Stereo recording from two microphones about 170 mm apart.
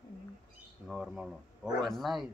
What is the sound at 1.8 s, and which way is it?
Speech, centre (ahead or behind).